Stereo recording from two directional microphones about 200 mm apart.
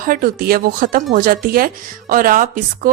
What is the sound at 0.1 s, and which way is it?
A woman's voice, 45° right (ahead or behind).